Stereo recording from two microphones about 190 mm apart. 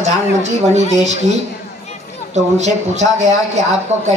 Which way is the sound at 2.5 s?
35° right (ahead or behind).